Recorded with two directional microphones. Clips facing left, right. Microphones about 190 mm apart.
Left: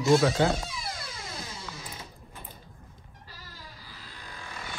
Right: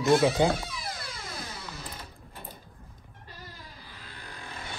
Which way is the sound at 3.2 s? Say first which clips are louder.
Right 2 dB; 55° right (ahead or behind).